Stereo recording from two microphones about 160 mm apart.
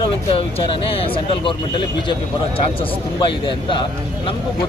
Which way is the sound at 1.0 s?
35° left (ahead or behind).